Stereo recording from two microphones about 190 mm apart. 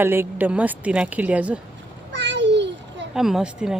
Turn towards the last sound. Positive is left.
turn(degrees=-5)  # may be behind; listen again after turning